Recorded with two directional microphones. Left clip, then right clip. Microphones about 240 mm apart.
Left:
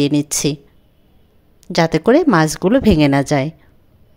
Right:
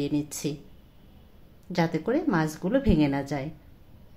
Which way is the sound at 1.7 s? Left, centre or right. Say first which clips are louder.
Left 13 dB; left.